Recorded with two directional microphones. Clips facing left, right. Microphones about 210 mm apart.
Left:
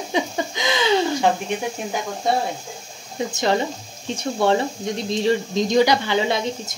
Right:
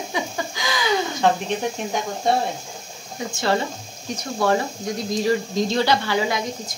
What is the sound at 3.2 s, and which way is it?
Speech, 25° left (ahead or behind).